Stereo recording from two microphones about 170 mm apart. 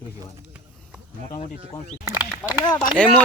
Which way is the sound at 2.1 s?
10° right (ahead or behind).